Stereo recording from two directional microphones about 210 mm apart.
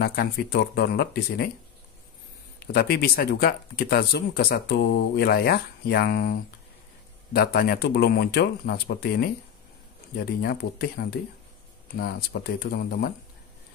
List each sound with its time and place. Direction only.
0.0 s speech: 45° left (ahead or behind)
2.6 s speech: 50° left (ahead or behind)